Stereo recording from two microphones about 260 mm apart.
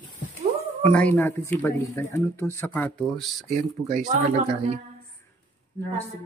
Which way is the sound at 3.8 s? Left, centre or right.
Right.